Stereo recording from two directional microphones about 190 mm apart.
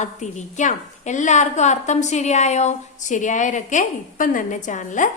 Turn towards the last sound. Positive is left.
turn(degrees=40)  # may be behind; listen again after turning